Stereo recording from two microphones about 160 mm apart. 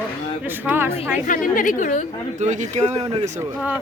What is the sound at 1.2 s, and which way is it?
Speech, 55° left (ahead or behind).